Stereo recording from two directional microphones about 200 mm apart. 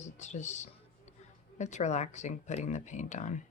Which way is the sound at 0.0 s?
35° left (ahead or behind).